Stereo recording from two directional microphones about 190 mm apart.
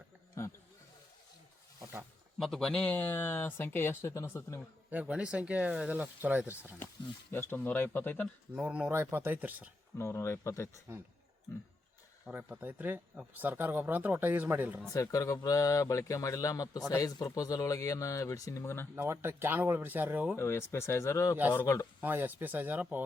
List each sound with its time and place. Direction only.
1.8 s a sound: 10° right (ahead or behind)
2.4 s speech: centre (ahead or behind)
4.9 s speech: 5° right (ahead or behind)
7.3 s speech: 10° left (ahead or behind)
8.5 s speech: 5° right (ahead or behind)
10.0 s speech: 15° left (ahead or behind)
12.2 s speech: 10° right (ahead or behind)
14.9 s speech: 15° left (ahead or behind)
18.9 s speech: 15° right (ahead or behind)
20.3 s speech: 15° left (ahead or behind)
22.0 s speech: 10° right (ahead or behind)